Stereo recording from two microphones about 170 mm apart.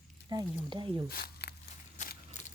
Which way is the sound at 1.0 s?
65° left (ahead or behind).